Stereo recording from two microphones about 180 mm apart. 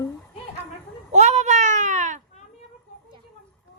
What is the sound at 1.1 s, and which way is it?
A child's voice, 40° right (ahead or behind).